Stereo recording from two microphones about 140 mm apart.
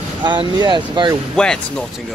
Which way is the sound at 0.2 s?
35° right (ahead or behind).